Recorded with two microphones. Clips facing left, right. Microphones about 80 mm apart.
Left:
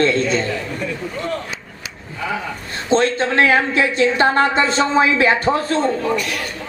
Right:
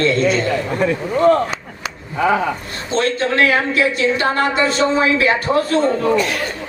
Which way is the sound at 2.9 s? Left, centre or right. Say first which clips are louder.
Left 2 dB; left.